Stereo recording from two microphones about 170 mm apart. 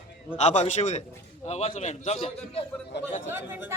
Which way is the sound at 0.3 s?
40° left (ahead or behind).